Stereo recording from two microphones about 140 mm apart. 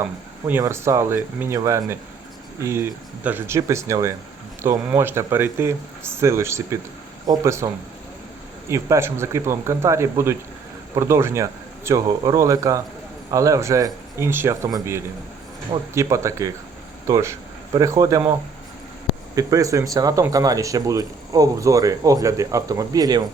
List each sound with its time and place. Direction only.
0.6 s speech: 20° right (ahead or behind)
8.7 s speech: 20° right (ahead or behind)
19.4 s speech: 25° right (ahead or behind)